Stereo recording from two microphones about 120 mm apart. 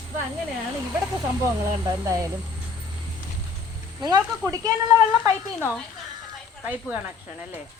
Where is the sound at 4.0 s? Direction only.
35° right (ahead or behind).